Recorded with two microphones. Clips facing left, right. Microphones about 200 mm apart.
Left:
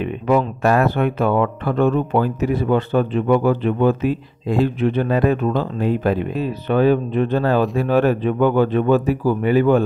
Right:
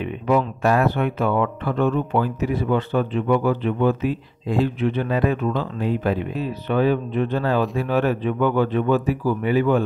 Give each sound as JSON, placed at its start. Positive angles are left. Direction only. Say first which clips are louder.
{"t": 0.0, "sound": "speech", "louder": "left 3 dB", "side_deg": 50}